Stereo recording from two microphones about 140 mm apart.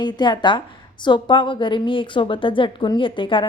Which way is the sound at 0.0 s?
30° left (ahead or behind).